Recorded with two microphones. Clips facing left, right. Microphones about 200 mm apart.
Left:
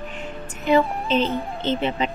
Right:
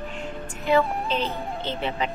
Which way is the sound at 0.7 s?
20° left (ahead or behind).